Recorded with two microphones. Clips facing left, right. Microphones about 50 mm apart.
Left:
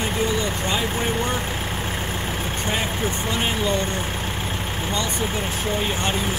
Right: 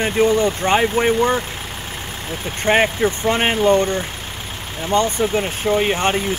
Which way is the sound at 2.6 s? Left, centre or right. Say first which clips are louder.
Right 11 dB; right.